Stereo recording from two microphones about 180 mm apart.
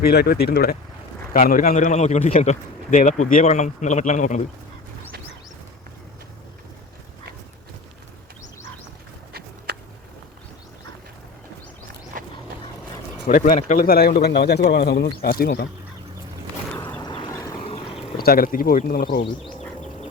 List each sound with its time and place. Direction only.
0.0 s a man's voice: 60° left (ahead or behind); by 4.4 s 40° left (ahead or behind)
12.1 s a sound: 50° right (ahead or behind)
13.2 s speech: 45° left (ahead or behind)
17.0 s vehicle: 25° left (ahead or behind)
17.6 s a sound: 35° left (ahead or behind)
18.2 s speech: 55° left (ahead or behind)